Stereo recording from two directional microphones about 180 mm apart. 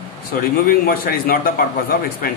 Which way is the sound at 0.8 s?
55° left (ahead or behind).